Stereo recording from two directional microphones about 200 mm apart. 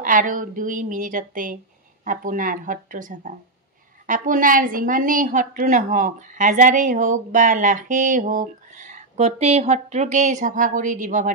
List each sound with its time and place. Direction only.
0.0 s a woman's voice: 40° right (ahead or behind)